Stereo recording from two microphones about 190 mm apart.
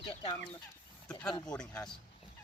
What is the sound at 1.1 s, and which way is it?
Speech, 5° left (ahead or behind).